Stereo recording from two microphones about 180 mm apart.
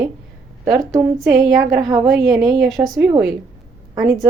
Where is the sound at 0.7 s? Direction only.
15° right (ahead or behind).